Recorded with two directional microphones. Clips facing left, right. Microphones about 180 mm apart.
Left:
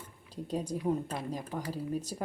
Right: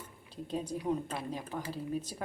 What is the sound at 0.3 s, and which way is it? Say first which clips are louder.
Speech: left 2 dB; 10° left (ahead or behind).